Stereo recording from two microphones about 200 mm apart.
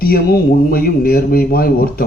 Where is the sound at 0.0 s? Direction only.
50° left (ahead or behind).